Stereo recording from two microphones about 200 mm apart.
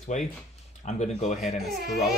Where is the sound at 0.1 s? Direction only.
35° left (ahead or behind).